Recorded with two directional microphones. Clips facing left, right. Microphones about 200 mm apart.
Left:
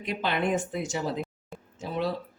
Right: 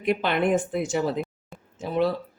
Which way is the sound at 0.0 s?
60° right (ahead or behind).